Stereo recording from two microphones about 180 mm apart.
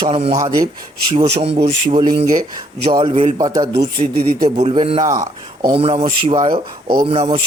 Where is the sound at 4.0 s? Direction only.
55° right (ahead or behind).